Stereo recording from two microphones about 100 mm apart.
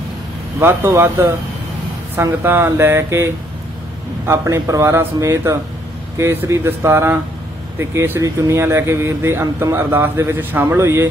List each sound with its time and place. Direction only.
0.6 s speech: 25° right (ahead or behind)
2.4 s speech: 25° right (ahead or behind)
4.3 s a man's voice: 30° right (ahead or behind)